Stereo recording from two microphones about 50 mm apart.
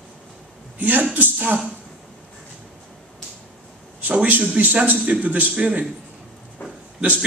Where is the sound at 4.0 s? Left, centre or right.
Right.